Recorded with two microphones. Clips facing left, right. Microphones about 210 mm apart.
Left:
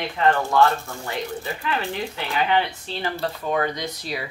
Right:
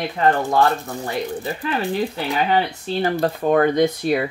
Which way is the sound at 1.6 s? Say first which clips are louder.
Right 6 dB; 35° right (ahead or behind).